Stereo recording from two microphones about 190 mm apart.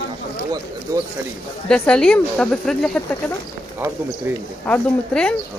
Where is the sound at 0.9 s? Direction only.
20° right (ahead or behind).